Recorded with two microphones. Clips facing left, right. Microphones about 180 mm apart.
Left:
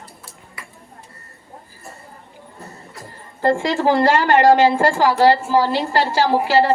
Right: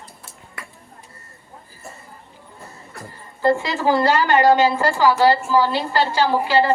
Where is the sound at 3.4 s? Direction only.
45° left (ahead or behind).